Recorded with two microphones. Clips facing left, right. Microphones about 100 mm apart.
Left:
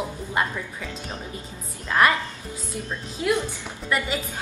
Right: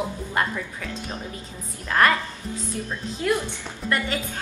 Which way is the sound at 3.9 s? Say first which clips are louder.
Even; 10° left (ahead or behind).